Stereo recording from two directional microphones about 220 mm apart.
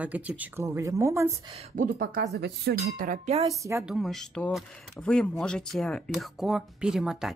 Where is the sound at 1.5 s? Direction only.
40° right (ahead or behind).